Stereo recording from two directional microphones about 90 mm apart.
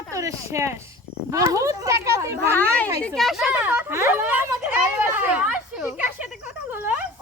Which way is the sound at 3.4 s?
20° right (ahead or behind).